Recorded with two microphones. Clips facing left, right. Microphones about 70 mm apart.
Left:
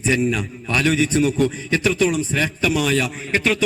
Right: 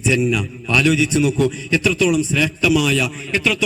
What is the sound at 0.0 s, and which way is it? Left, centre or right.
A man's voice, left.